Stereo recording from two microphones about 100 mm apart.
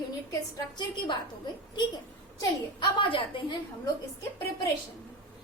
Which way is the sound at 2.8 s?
55° left (ahead or behind).